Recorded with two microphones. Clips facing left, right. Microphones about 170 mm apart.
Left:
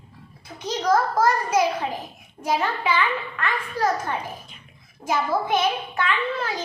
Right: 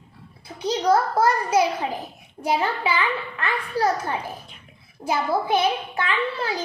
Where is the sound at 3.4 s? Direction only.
35° right (ahead or behind).